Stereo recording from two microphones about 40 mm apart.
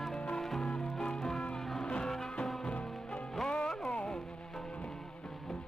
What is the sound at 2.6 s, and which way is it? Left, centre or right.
Music, left.